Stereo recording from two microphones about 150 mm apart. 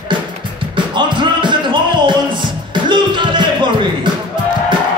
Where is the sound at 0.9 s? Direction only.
30° right (ahead or behind).